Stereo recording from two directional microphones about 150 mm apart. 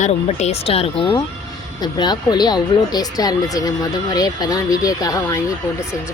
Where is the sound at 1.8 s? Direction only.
30° left (ahead or behind).